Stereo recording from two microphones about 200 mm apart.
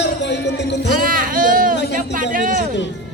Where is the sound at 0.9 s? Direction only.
45° right (ahead or behind).